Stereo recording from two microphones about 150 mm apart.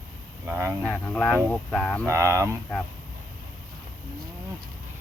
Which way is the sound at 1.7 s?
5° left (ahead or behind).